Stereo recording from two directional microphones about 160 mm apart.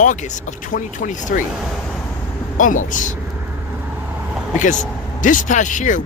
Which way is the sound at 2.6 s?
55° left (ahead or behind).